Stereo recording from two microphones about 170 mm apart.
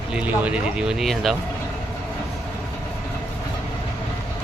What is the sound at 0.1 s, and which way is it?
Speech, 10° right (ahead or behind).